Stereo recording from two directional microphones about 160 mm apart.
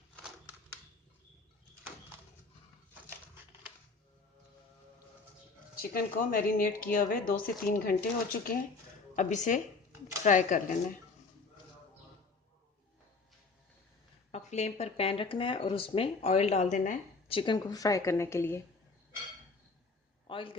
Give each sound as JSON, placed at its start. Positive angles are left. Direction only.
{"t": 5.8, "sound": "speech", "side_deg": 65}
{"t": 9.1, "sound": "speech", "side_deg": 50}
{"t": 14.3, "sound": "speech", "side_deg": 45}
{"t": 17.2, "sound": "a woman's voice", "side_deg": 30}
{"t": 20.2, "sound": "a sound", "side_deg": 35}